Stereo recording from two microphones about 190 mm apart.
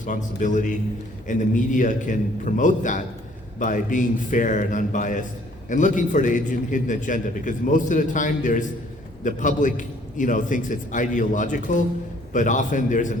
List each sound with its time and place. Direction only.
0.0 s a man's voice: 40° left (ahead or behind)